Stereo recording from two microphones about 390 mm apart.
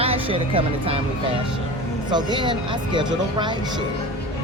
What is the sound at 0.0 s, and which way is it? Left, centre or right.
Speech, centre.